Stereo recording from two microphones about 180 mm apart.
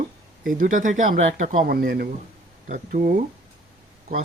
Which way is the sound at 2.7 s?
45° right (ahead or behind).